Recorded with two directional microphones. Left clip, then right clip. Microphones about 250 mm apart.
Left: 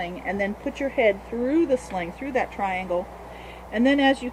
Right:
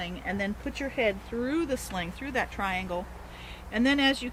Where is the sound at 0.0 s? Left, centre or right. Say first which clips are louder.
Left 6 dB; right.